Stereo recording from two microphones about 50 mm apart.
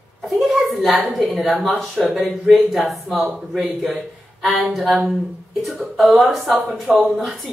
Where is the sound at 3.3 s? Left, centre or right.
Centre.